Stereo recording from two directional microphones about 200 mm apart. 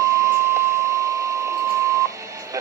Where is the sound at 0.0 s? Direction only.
15° right (ahead or behind).